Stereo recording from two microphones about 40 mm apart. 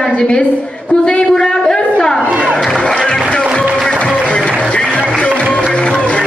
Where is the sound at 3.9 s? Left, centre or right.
Left.